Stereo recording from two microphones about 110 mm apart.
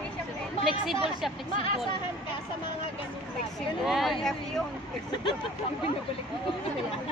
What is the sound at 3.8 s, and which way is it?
Speech, centre (ahead or behind).